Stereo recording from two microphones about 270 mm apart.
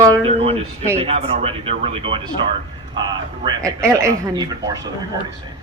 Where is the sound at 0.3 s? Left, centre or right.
Right.